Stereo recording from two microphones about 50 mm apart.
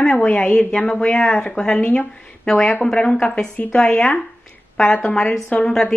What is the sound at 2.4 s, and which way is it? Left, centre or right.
A woman's voice, centre.